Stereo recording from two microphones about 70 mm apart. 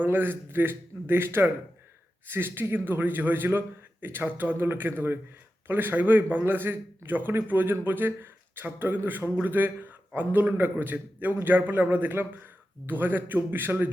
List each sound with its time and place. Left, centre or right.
0.0 s a man's voice: right